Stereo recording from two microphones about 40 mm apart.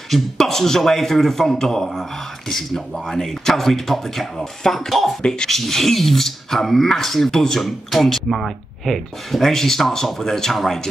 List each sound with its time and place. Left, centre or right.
0.1 s a man's voice: centre
5.2 s speech: left
5.5 s a man's voice: centre